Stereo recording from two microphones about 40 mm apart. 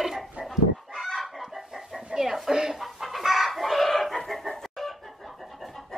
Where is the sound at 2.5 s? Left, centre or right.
Centre.